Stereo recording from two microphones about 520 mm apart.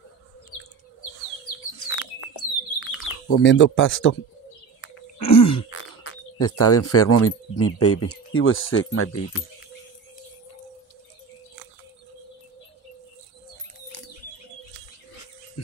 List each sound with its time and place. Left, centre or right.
1.9 s bird: left
2.8 s speech: left
4.8 s a sound: left
8.1 s speech: left